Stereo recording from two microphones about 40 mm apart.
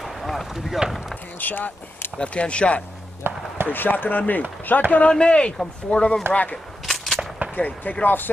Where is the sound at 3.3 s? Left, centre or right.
Right.